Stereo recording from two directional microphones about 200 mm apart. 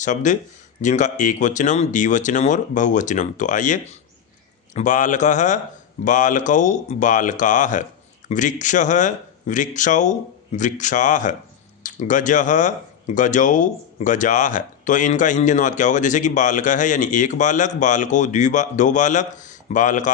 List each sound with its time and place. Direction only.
0.0 s speech: 40° left (ahead or behind)